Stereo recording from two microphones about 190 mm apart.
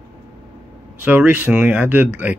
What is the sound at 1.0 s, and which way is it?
Speech, 10° right (ahead or behind).